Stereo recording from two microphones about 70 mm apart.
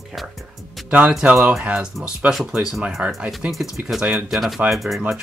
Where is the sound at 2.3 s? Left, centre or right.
Centre.